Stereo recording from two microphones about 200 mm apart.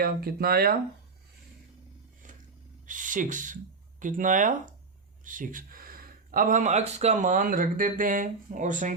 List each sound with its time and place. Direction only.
0.0 s speech: 50° right (ahead or behind)
2.8 s speech: 40° right (ahead or behind)